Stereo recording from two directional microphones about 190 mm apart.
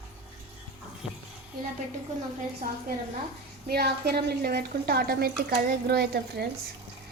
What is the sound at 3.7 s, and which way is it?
Speech, 55° right (ahead or behind).